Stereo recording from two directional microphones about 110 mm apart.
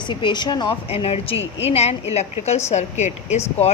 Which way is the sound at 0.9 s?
65° left (ahead or behind).